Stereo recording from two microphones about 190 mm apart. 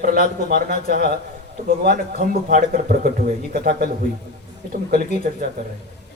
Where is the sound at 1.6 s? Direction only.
50° right (ahead or behind).